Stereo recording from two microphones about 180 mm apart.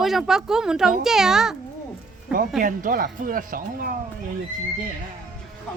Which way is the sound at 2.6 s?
50° right (ahead or behind).